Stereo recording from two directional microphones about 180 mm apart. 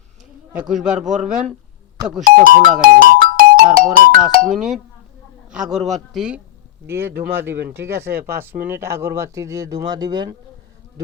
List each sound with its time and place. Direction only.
0.5 s speech: 5° right (ahead or behind)
2.2 s speech: 50° right (ahead or behind)
4.5 s speech: centre (ahead or behind)
7.5 s speech: 65° right (ahead or behind)
7.9 s speech: 15° right (ahead or behind)